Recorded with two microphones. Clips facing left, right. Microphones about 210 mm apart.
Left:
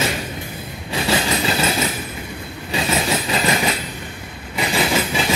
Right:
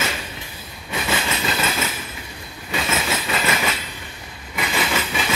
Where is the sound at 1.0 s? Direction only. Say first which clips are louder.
Left 5 dB; 35° left (ahead or behind).